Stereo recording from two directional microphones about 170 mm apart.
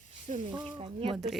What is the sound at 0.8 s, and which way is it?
Speech, 35° right (ahead or behind).